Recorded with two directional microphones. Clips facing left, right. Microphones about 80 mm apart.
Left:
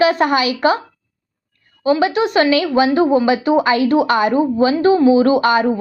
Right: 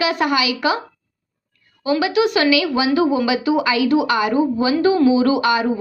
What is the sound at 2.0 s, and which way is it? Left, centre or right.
Speech, left.